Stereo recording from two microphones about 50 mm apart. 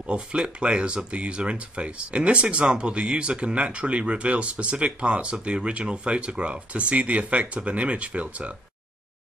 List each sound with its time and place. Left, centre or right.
0.0 s speech: right